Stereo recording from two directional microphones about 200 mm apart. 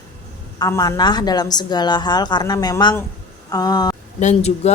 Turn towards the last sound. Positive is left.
turn(degrees=35)  # may be behind; listen again after turning